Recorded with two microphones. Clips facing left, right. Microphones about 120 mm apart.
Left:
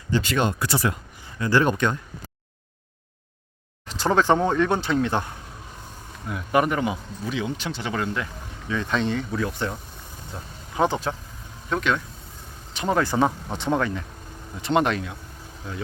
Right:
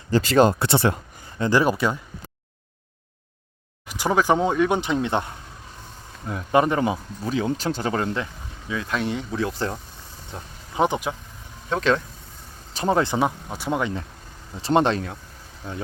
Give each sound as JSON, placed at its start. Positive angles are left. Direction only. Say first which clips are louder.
{"t": 0.1, "sound": "speech", "louder": "right 6 dB", "side_deg": -40}
{"t": 1.5, "sound": "speech", "louder": "right 1 dB", "side_deg": -10}
{"t": 3.8, "sound": "speech", "louder": "even", "side_deg": -10}
{"t": 6.2, "sound": "speech", "louder": "right 2 dB", "side_deg": -25}
{"t": 8.7, "sound": "speech", "louder": "left 1 dB", "side_deg": -5}
{"t": 9.1, "sound": "speech", "louder": "even", "side_deg": -25}
{"t": 10.8, "sound": "speech", "louder": "right 1 dB", "side_deg": -15}
{"t": 11.7, "sound": "speech", "louder": "right 3 dB", "side_deg": -35}
{"t": 13.1, "sound": "speech", "louder": "left 1 dB", "side_deg": -5}
{"t": 14.6, "sound": "speech", "louder": "right 2 dB", "side_deg": -30}